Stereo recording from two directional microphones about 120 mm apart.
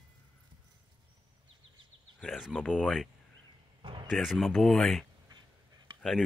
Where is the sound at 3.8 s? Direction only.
45° right (ahead or behind).